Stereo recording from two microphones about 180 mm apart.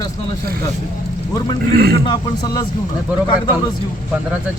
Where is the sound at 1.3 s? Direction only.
20° left (ahead or behind).